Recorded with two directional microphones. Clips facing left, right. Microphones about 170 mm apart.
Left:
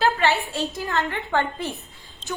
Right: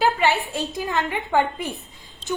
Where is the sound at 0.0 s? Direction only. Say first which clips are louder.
Right 1 dB; 15° right (ahead or behind).